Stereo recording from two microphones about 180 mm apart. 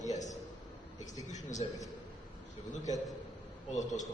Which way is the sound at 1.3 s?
40° left (ahead or behind).